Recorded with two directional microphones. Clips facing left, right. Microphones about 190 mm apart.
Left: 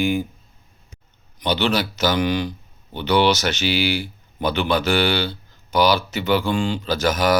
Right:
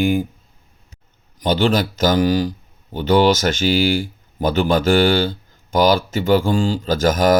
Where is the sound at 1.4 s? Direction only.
45° right (ahead or behind).